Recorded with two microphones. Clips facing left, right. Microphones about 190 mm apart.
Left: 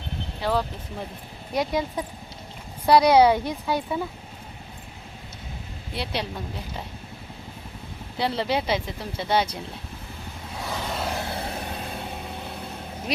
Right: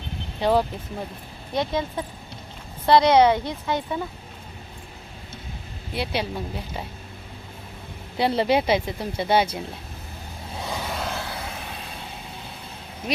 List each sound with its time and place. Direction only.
0.4 s speech: 20° right (ahead or behind)
1.5 s a woman's voice: 15° left (ahead or behind)
5.9 s a woman's voice: centre (ahead or behind)
8.2 s speech: 15° right (ahead or behind)
10.6 s vehicle: 15° right (ahead or behind)
11.0 s vehicle: 15° left (ahead or behind)
11.3 s vehicle: 35° left (ahead or behind)
13.1 s speech: centre (ahead or behind)